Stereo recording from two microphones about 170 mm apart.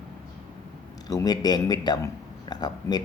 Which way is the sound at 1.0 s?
20° left (ahead or behind).